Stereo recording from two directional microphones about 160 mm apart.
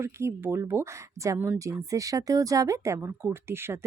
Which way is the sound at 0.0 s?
15° right (ahead or behind).